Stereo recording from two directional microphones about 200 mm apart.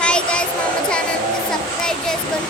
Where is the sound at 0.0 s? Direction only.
5° left (ahead or behind).